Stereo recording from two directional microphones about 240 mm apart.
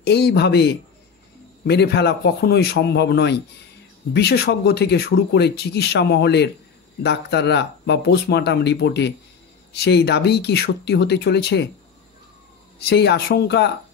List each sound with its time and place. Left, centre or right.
0.0 s speech: left
12.7 s speech: left